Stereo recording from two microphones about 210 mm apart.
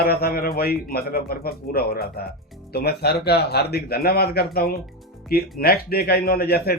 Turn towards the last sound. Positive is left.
turn(degrees=45)  # may be behind; listen again after turning